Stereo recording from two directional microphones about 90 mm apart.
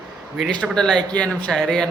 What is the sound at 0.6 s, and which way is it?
A man's voice, 5° left (ahead or behind).